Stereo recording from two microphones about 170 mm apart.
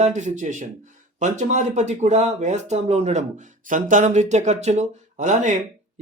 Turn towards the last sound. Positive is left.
turn(degrees=-45)  # may be behind; listen again after turning